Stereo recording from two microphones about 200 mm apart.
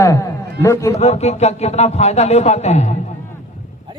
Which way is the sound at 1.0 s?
35° left (ahead or behind).